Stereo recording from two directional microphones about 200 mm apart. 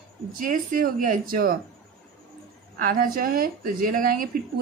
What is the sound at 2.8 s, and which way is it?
Speech, 45° right (ahead or behind).